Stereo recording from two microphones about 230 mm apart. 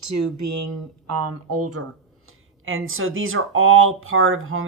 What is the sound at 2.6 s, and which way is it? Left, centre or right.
Speech, right.